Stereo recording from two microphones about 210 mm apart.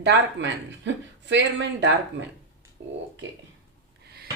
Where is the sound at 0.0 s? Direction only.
60° right (ahead or behind).